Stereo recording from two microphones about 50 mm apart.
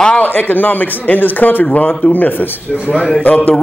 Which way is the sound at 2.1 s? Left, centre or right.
Left.